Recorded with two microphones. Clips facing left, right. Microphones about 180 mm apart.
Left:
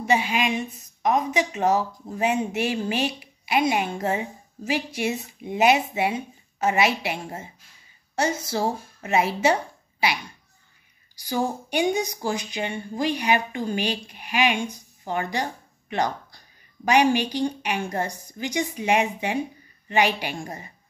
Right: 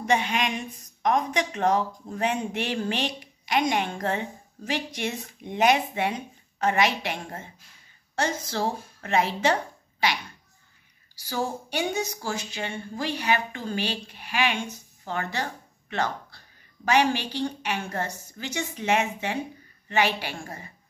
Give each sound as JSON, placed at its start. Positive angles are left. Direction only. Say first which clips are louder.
{"t": 0.0, "sound": "a woman's voice", "louder": "left 2 dB", "side_deg": 10}
{"t": 11.1, "sound": "a woman's voice", "louder": "left 4 dB", "side_deg": 15}